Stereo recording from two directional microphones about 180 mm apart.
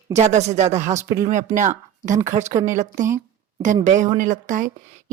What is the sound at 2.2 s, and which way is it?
Speech, 45° right (ahead or behind).